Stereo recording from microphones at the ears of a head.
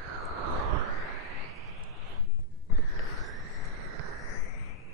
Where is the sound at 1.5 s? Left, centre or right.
Right.